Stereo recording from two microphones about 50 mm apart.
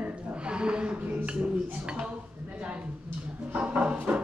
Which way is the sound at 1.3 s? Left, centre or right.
Right.